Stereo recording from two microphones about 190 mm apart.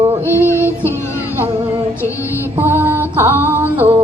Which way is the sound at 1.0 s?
15° left (ahead or behind).